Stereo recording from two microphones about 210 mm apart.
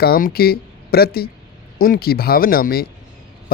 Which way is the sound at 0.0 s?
45° left (ahead or behind).